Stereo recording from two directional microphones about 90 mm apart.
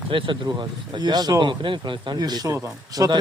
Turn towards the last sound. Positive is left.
turn(degrees=-40)  # may be behind; listen again after turning